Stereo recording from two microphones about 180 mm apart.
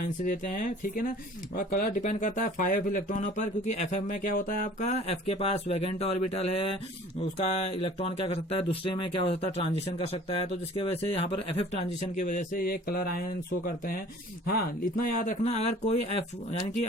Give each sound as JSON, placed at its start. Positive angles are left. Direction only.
{"t": 0.0, "sound": "speech", "side_deg": 45}
{"t": 15.2, "sound": "speech", "side_deg": 40}